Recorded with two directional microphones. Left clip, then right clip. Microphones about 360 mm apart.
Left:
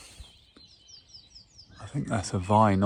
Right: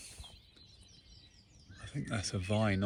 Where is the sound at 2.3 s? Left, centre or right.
Centre.